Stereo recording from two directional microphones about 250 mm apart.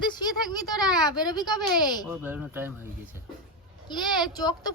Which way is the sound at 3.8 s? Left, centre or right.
Centre.